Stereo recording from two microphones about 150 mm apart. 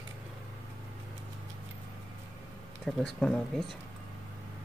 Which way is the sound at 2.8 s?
5° left (ahead or behind).